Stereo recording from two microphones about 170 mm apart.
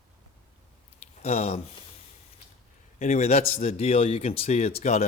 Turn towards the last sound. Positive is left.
turn(degrees=40)  # may be behind; listen again after turning